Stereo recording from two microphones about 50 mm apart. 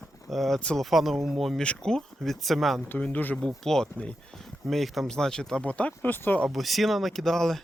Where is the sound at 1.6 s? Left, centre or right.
Centre.